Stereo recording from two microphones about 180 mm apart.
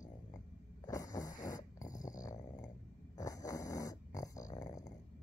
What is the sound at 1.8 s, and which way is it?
Dog, 45° left (ahead or behind).